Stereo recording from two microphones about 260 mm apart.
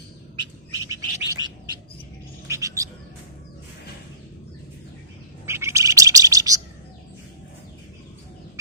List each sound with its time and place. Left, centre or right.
0.7 s bird: centre
5.5 s bird: centre